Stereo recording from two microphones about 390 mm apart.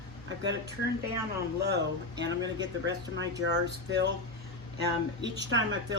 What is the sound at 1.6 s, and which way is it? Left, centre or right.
Speech, right.